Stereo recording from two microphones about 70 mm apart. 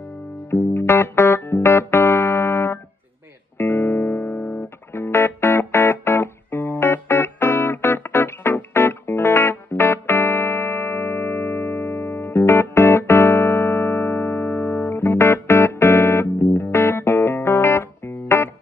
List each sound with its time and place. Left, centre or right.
0.5 s music: left